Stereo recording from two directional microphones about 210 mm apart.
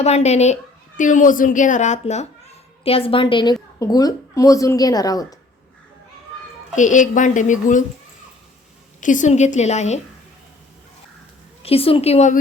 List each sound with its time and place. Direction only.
0.0 s a woman's voice: 30° left (ahead or behind)
6.7 s a woman's voice: 35° left (ahead or behind)
9.0 s a woman's voice: 35° left (ahead or behind)
11.6 s a woman's voice: 25° left (ahead or behind)